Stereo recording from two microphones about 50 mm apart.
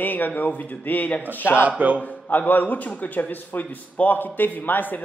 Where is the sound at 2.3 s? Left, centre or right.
Left.